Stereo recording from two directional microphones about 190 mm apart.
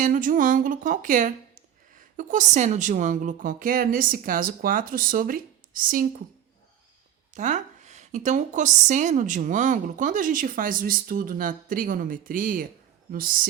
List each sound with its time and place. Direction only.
0.0 s a woman's voice: 45° right (ahead or behind)
7.3 s a woman's voice: 40° right (ahead or behind)